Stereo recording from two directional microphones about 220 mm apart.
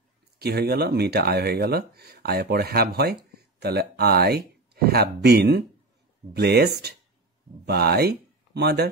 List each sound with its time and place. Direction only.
0.4 s speech: 45° right (ahead or behind)